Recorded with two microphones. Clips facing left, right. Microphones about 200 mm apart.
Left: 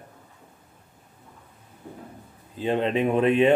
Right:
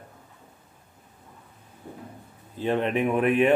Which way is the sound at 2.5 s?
20° left (ahead or behind).